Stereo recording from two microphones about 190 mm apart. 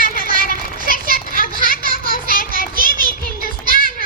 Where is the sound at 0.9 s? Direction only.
45° left (ahead or behind).